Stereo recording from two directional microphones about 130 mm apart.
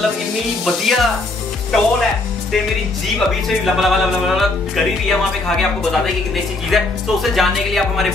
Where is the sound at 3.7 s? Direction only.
Centre (ahead or behind).